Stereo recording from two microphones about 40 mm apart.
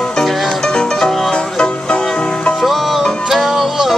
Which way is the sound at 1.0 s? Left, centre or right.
Centre.